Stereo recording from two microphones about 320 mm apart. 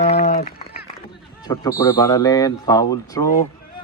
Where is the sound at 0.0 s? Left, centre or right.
Centre.